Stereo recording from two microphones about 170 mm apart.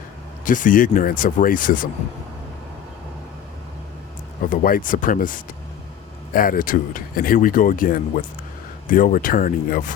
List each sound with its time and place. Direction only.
0.4 s speech: 50° left (ahead or behind)
4.4 s speech: 55° left (ahead or behind)